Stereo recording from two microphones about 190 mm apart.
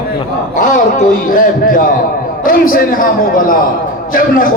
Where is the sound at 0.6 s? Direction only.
45° left (ahead or behind).